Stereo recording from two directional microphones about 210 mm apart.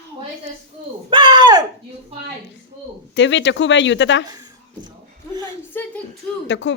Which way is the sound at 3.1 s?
60° left (ahead or behind).